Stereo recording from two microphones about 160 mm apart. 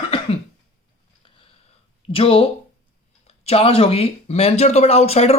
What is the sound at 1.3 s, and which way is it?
Sniff, 30° left (ahead or behind).